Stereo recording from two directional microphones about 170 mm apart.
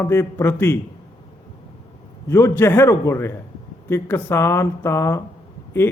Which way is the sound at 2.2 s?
15° left (ahead or behind).